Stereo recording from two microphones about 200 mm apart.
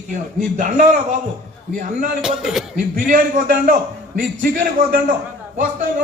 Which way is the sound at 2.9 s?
45° right (ahead or behind).